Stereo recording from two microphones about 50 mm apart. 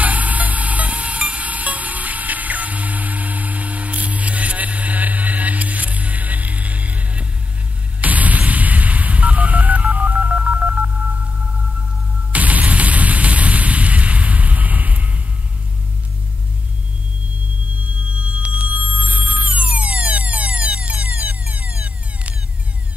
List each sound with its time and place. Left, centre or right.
0.0 s a sound: right
8.0 s telephone dialing: right
12.3 s music: right
18.1 s music: right